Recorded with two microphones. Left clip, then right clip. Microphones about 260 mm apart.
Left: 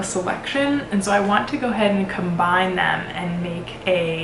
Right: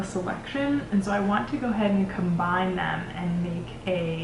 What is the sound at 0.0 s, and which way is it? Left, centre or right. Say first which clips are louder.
Speech: left 7 dB; centre.